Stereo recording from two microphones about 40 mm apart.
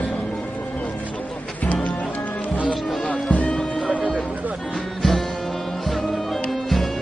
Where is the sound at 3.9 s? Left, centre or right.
Right.